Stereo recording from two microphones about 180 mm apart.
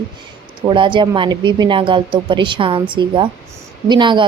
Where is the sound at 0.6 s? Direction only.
25° right (ahead or behind).